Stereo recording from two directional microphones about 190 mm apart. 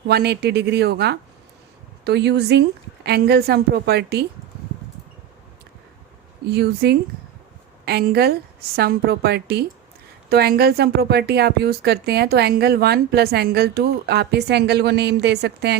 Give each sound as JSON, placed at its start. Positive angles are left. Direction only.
{"t": 0.1, "sound": "speech", "side_deg": -60}
{"t": 6.4, "sound": "speech", "side_deg": -60}